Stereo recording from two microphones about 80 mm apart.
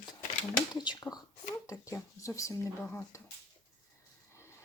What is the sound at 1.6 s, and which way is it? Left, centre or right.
Speech, left.